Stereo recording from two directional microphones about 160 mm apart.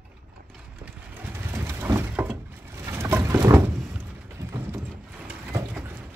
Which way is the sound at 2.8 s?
15° right (ahead or behind).